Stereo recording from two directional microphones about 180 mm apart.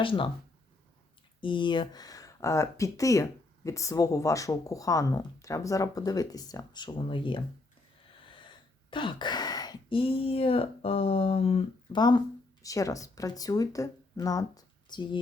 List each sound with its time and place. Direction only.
0.0 s speech: 30° left (ahead or behind)
1.4 s speech: 25° left (ahead or behind)